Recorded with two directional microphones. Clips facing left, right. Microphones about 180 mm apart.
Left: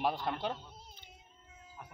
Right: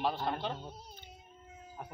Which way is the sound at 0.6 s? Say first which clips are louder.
Right 7 dB; 40° right (ahead or behind).